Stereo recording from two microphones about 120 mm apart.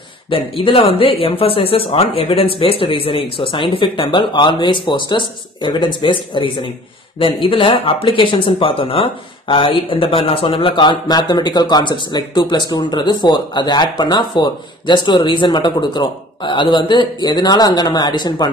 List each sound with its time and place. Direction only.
0.3 s speech: 50° left (ahead or behind)